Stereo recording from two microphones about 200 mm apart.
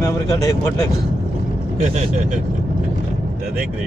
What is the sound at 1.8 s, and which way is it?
Speech, 35° right (ahead or behind).